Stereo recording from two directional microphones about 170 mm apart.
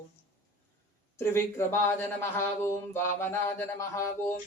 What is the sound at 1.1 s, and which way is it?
Speech, 15° left (ahead or behind).